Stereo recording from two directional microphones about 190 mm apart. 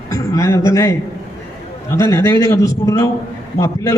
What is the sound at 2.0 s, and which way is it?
A man's voice, 15° left (ahead or behind).